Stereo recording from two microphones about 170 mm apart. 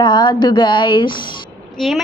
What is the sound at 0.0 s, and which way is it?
Speech, 25° left (ahead or behind).